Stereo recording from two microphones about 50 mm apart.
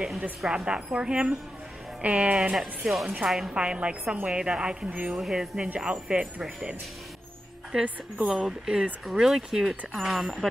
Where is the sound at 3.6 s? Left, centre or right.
Right.